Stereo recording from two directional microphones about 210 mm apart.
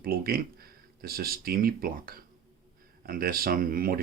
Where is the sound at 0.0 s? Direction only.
45° right (ahead or behind).